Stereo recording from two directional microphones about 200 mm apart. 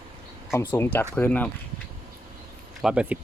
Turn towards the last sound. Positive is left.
turn(degrees=-5)  # may be behind; listen again after turning